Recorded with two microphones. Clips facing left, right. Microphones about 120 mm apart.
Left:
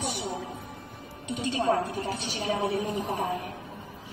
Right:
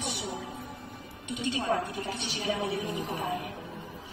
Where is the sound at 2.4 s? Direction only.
25° left (ahead or behind).